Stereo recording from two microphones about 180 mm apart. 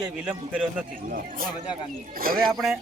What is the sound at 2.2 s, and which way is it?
Speech, 55° right (ahead or behind).